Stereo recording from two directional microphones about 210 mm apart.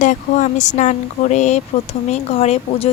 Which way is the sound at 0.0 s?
35° left (ahead or behind).